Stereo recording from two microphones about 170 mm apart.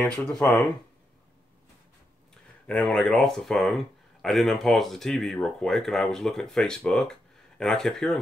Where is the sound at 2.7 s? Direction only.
5° left (ahead or behind).